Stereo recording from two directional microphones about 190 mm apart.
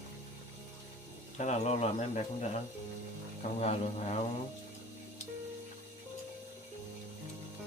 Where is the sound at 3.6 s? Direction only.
35° left (ahead or behind).